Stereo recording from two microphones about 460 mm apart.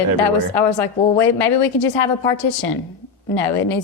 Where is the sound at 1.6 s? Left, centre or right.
Left.